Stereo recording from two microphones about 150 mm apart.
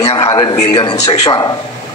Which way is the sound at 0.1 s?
35° left (ahead or behind).